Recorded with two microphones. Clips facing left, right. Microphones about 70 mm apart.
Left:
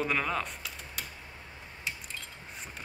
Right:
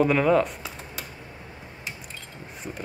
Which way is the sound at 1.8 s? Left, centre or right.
Centre.